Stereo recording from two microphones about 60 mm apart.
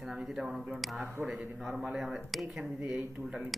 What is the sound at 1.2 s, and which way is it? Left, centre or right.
Speech, centre.